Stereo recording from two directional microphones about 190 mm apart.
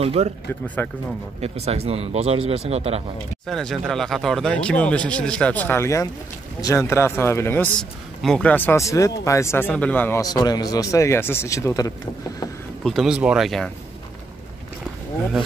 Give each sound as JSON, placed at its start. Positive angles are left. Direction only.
{"t": 0.0, "sound": "speech", "side_deg": -30}
{"t": 0.8, "sound": "speech", "side_deg": 10}
{"t": 1.4, "sound": "speech", "side_deg": -35}
{"t": 3.4, "sound": "speech", "side_deg": 0}
{"t": 12.8, "sound": "speech", "side_deg": 0}